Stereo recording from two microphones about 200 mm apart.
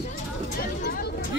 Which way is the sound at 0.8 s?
50° left (ahead or behind).